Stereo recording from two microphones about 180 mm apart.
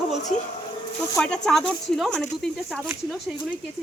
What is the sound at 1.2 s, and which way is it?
A woman's voice, 5° left (ahead or behind).